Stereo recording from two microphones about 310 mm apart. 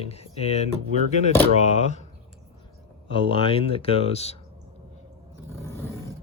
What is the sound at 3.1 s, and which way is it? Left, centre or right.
Speech, centre.